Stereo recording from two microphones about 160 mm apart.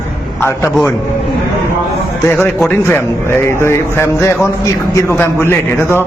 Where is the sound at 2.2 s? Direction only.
10° left (ahead or behind).